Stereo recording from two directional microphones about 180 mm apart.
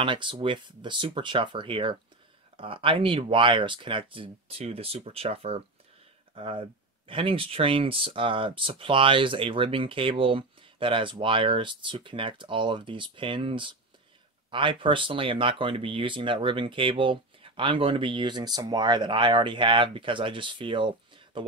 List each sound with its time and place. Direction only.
0.0 s speech: 25° right (ahead or behind)